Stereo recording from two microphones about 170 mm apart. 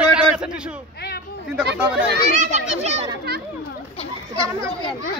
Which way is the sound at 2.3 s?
40° right (ahead or behind).